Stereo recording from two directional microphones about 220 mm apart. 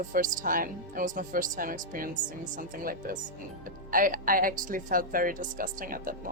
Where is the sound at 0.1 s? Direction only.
35° right (ahead or behind).